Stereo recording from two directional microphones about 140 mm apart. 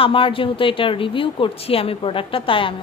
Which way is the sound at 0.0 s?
40° left (ahead or behind).